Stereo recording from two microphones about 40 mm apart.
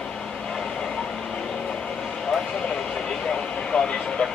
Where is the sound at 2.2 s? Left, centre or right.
Centre.